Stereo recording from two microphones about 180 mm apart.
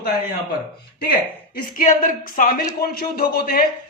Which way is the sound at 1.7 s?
50° left (ahead or behind).